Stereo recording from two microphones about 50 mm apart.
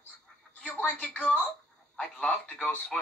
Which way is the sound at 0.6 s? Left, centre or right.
Left.